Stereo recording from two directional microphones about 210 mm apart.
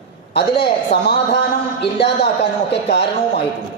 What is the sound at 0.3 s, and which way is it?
A man's voice, 50° left (ahead or behind).